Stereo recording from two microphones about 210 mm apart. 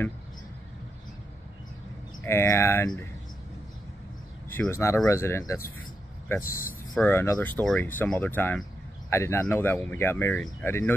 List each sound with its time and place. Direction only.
2.2 s speech: 10° left (ahead or behind)
4.5 s speech: 10° left (ahead or behind)